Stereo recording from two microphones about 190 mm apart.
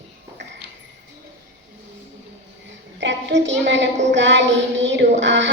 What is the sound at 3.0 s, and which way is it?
Speech, 70° right (ahead or behind).